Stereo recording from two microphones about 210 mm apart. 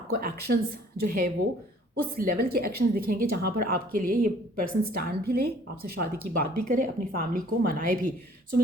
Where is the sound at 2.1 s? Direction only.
45° right (ahead or behind).